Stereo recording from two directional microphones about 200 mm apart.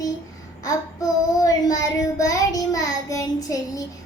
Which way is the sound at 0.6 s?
15° left (ahead or behind).